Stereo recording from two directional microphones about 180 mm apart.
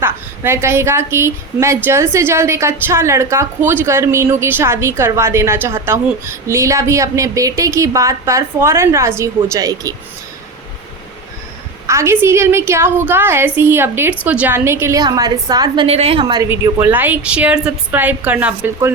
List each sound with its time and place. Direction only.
0.0 s a woman's voice: 15° right (ahead or behind)
11.9 s a woman's voice: 15° right (ahead or behind); by 16.2 s 35° right (ahead or behind)
16.5 s a woman's voice: 15° right (ahead or behind)